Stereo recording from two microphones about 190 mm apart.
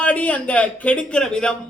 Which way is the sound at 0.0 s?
5° left (ahead or behind).